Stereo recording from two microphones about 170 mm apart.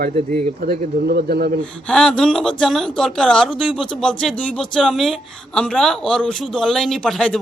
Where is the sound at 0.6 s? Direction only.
65° right (ahead or behind).